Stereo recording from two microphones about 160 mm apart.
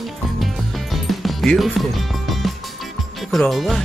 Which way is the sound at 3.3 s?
Centre (ahead or behind).